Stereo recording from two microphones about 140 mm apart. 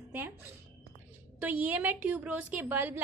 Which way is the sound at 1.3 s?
10° right (ahead or behind).